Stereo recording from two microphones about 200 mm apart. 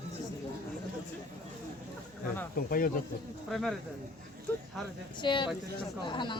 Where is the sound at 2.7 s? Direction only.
45° left (ahead or behind).